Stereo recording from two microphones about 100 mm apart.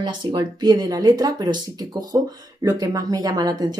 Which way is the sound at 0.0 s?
50° right (ahead or behind).